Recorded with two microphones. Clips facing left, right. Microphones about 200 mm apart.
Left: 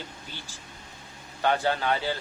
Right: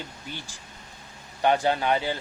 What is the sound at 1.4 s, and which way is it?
Speech, 15° right (ahead or behind).